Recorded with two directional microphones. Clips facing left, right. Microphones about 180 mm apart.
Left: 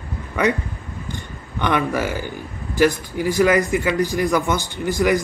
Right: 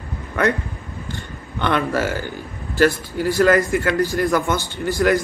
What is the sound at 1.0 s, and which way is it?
A man's voice, 15° left (ahead or behind).